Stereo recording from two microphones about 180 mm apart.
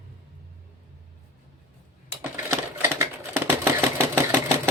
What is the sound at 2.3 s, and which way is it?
Sewing machine, 15° right (ahead or behind).